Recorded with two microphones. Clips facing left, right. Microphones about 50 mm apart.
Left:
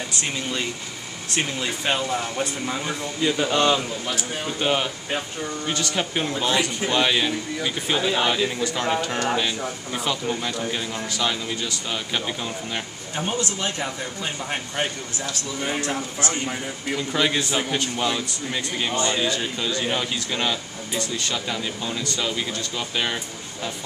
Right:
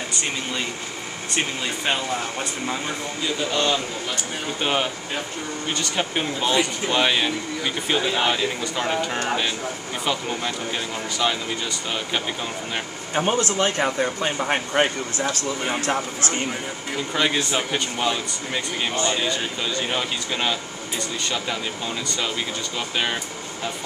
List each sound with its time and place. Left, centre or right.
0.1 s speech: centre
3.5 s a man's voice: centre
4.1 s speech: centre
13.1 s speech: right
17.1 s speech: centre